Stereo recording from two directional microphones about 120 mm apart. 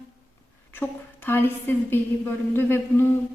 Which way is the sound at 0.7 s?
15° left (ahead or behind).